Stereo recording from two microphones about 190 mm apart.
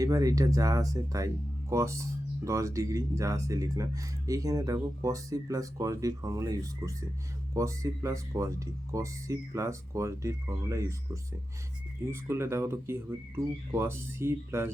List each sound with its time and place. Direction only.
0.0 s speech: 20° right (ahead or behind)